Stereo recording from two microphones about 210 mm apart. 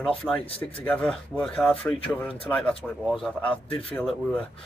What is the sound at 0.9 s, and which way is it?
Speech, 5° left (ahead or behind).